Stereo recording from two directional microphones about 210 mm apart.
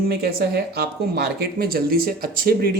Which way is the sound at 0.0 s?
50° right (ahead or behind).